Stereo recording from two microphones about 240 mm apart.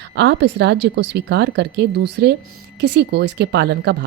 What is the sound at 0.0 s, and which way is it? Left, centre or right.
Speech, right.